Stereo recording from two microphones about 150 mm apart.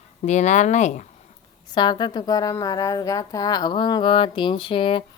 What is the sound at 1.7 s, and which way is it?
Speech, 30° left (ahead or behind).